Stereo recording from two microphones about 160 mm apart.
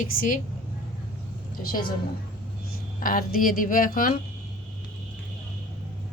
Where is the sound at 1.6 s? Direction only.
65° left (ahead or behind).